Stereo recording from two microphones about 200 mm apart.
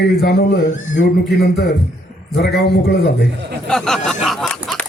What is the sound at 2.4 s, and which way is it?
Speech, 55° left (ahead or behind).